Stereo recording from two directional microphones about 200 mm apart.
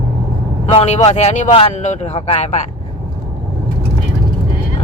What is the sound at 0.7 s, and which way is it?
Speech, 30° left (ahead or behind).